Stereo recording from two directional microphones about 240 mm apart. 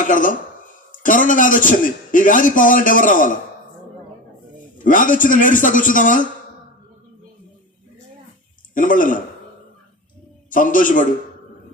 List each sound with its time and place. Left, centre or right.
0.0 s a man's voice: left
4.8 s a man's voice: left
8.7 s a man's voice: left
10.5 s a man's voice: left